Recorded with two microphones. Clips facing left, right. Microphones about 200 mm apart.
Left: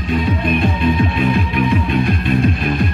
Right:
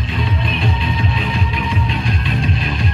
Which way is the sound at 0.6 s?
55° left (ahead or behind).